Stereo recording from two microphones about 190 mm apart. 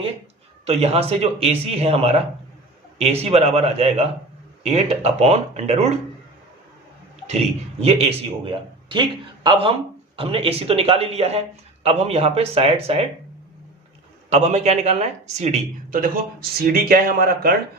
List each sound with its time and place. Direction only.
0.6 s a man's voice: 30° right (ahead or behind)
7.3 s a man's voice: 35° right (ahead or behind)
14.3 s a man's voice: 35° right (ahead or behind)